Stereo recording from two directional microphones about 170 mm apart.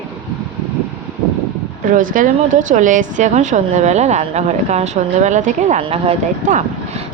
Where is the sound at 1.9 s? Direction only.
50° right (ahead or behind).